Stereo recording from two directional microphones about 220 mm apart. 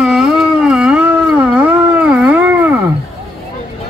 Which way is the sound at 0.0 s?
Centre (ahead or behind).